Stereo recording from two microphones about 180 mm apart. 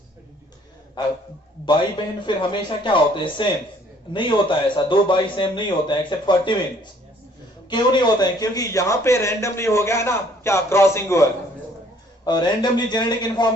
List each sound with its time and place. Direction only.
1.0 s a man's voice: 25° left (ahead or behind)
2.2 s a man's voice: 25° left (ahead or behind)
7.7 s a man's voice: 25° left (ahead or behind)